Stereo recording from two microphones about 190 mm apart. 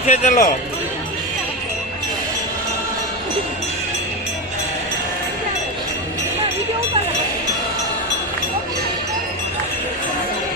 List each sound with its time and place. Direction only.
0.0 s a man's voice: 35° left (ahead or behind)